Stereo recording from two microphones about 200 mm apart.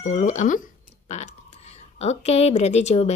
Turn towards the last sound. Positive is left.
turn(degrees=35)  # may be behind; listen again after turning